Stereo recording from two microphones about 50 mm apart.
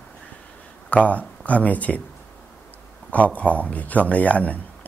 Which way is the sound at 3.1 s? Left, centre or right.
Left.